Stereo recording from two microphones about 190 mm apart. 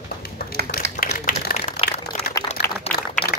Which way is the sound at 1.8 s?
30° left (ahead or behind).